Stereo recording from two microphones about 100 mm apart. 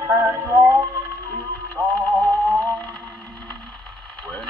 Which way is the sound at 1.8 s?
30° right (ahead or behind).